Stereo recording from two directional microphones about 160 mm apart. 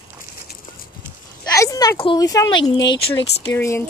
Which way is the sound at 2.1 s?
20° left (ahead or behind).